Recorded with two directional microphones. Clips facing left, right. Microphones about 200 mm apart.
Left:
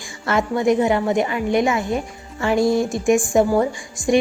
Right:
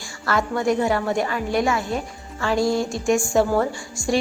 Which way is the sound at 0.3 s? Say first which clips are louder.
Left 3 dB; 20° left (ahead or behind).